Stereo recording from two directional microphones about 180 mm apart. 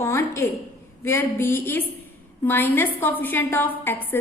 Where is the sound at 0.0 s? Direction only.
15° left (ahead or behind).